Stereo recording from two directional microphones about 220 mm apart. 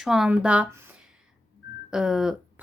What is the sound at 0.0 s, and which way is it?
A woman's voice, centre (ahead or behind).